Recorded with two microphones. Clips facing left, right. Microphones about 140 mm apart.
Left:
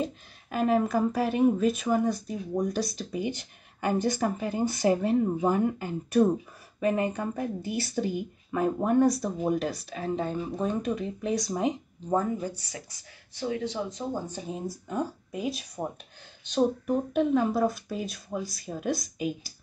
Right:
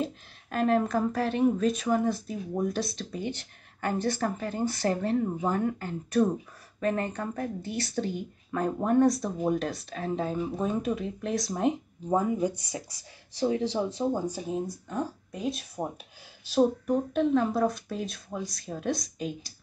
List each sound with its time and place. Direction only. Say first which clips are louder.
0.0 s speech: even; 5° left (ahead or behind)
3.1 s speech: left 3 dB; 10° left (ahead or behind); by 12.8 s 20° right (ahead or behind)
13.3 s speech: right 4 dB; 30° right (ahead or behind)
14.9 s speech: left 1 dB; 10° left (ahead or behind)